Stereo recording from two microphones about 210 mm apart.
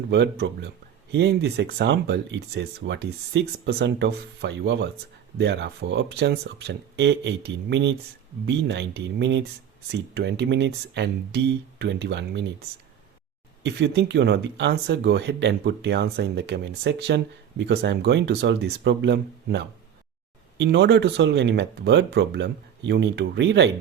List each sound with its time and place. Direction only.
0.1 s speech: 55° right (ahead or behind)
13.6 s speech: 55° right (ahead or behind)